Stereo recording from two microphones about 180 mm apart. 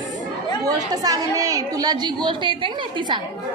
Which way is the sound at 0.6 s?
20° right (ahead or behind).